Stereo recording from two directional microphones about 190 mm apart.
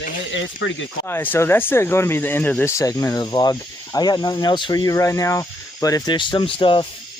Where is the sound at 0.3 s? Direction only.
80° left.